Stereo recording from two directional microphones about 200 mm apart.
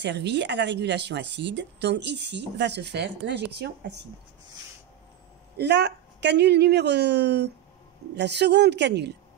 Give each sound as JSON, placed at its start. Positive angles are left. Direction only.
{"t": 0.0, "sound": "speech", "side_deg": -60}
{"t": 5.6, "sound": "speech", "side_deg": -60}